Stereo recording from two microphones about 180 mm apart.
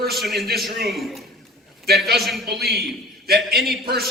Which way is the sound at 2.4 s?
60° right (ahead or behind).